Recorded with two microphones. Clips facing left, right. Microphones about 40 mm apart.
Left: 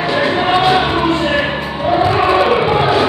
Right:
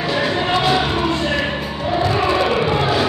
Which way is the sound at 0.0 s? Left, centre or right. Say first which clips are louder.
Left 5 dB; centre.